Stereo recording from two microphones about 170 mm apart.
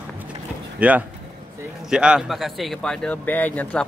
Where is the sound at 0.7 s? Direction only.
10° right (ahead or behind).